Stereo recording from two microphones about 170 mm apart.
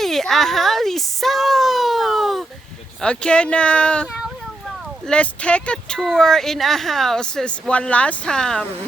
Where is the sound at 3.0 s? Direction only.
5° left (ahead or behind).